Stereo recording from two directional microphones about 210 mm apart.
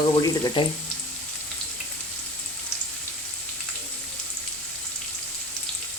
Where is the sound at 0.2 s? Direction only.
20° left (ahead or behind).